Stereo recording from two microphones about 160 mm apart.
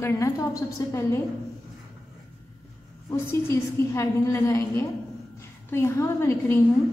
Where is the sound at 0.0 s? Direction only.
20° left (ahead or behind).